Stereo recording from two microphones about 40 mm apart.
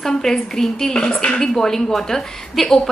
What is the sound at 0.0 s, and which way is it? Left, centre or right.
A woman's voice, centre.